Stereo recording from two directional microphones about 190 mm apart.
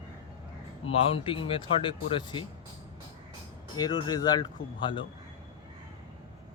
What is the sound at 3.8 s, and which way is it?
Speech, 20° left (ahead or behind).